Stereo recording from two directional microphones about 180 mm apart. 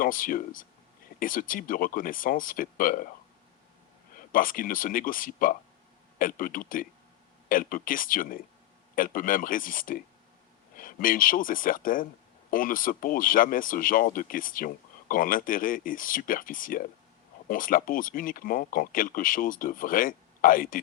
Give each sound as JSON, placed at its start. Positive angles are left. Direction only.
{"t": 0.0, "sound": "speech", "side_deg": 50}
{"t": 4.1, "sound": "speech", "side_deg": 50}